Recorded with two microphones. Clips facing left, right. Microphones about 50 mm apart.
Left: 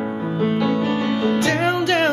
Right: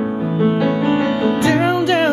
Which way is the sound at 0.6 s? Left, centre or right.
Right.